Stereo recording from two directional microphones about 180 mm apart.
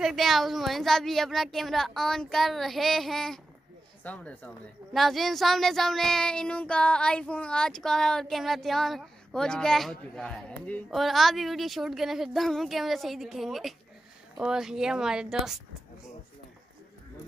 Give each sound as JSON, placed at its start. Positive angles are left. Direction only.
{"t": 0.0, "sound": "child singing", "side_deg": 0}
{"t": 4.0, "sound": "speech", "side_deg": 5}
{"t": 4.9, "sound": "child singing", "side_deg": 0}